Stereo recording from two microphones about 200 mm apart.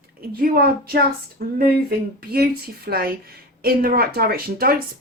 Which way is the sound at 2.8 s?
50° right (ahead or behind).